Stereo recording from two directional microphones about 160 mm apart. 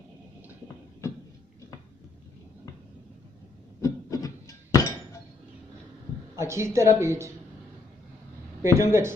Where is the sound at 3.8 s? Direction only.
20° left (ahead or behind).